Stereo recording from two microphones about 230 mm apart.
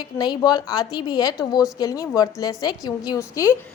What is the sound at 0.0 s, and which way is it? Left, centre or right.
A woman's voice, centre.